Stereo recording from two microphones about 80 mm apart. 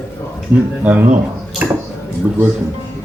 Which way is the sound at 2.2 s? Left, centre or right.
Centre.